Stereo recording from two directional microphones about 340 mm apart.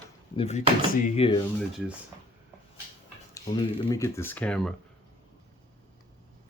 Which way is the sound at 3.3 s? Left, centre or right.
Centre.